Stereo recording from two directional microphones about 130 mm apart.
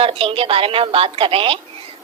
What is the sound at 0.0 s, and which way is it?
A woman's voice, 45° right (ahead or behind).